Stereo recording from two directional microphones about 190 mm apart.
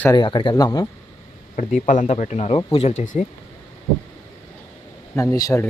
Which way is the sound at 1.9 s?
40° left (ahead or behind).